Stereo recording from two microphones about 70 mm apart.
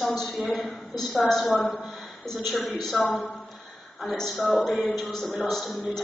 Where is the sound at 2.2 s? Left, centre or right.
Centre.